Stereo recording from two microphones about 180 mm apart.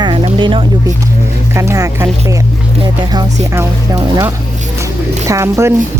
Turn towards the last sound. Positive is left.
turn(degrees=-15)  # may be behind; listen again after turning